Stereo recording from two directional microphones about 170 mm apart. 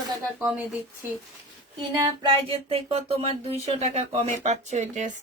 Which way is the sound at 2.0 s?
35° right (ahead or behind).